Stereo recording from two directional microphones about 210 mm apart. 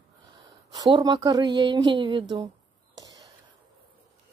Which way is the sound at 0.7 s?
20° right (ahead or behind).